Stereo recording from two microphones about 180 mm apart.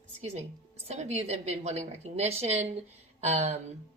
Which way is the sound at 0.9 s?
40° right (ahead or behind).